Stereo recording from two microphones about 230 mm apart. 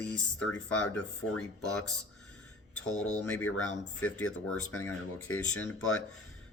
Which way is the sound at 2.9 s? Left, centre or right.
Left.